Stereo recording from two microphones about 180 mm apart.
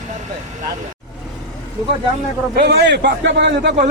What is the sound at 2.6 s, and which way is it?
A man's voice, 65° right (ahead or behind).